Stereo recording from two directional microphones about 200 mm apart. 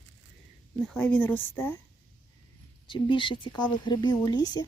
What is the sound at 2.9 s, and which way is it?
Speech, 25° left (ahead or behind).